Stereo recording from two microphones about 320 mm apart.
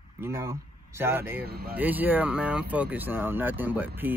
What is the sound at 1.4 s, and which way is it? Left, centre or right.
Speech, right.